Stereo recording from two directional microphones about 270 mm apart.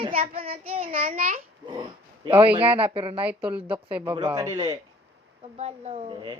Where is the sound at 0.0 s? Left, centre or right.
Right.